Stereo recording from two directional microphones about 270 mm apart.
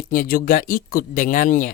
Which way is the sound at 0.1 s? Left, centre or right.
Left.